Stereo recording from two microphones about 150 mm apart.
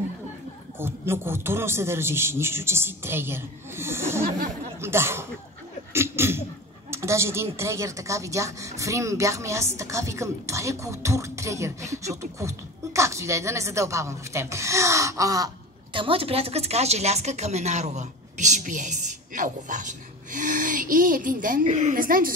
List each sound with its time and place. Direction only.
0.7 s a man's voice: 15° right (ahead or behind)
5.9 s sneeze: 15° right (ahead or behind)
6.9 s a sound: 20° right (ahead or behind)
7.5 s speech: 20° right (ahead or behind); by 22.3 s 70° right (ahead or behind)